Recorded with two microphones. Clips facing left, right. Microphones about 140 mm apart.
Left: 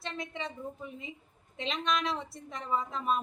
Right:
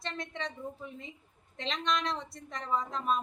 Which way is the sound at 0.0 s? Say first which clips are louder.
Even; 5° left (ahead or behind).